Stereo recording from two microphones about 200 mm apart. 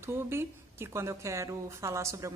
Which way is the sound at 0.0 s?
10° right (ahead or behind).